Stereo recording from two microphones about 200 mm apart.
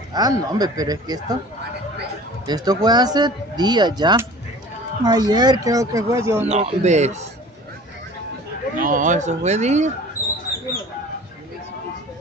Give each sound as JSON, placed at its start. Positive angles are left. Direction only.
{"t": 0.1, "sound": "speech", "side_deg": -20}
{"t": 2.4, "sound": "speech", "side_deg": -20}
{"t": 6.4, "sound": "speech", "side_deg": -30}
{"t": 8.7, "sound": "speech", "side_deg": -40}